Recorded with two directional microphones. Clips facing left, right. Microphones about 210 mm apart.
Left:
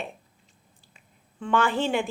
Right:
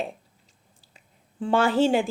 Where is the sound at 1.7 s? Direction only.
45° right (ahead or behind).